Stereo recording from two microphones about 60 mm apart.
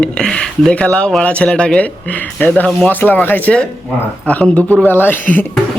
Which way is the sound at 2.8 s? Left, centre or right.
Left.